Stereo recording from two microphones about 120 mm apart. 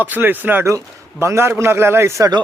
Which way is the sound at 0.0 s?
15° right (ahead or behind).